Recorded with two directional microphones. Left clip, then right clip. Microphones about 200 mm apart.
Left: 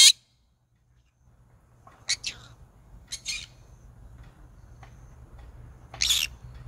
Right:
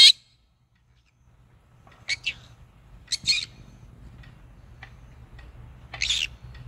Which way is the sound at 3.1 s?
30° left (ahead or behind).